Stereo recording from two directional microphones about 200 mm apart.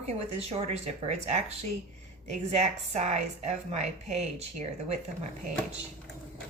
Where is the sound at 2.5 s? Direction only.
35° right (ahead or behind).